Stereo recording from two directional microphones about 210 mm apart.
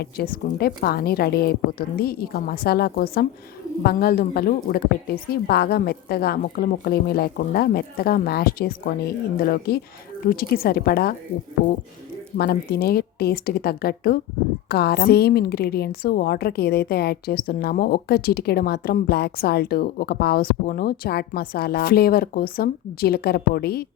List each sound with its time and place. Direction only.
0.0 s a woman's voice: 50° left (ahead or behind)
12.4 s a woman's voice: 50° left (ahead or behind)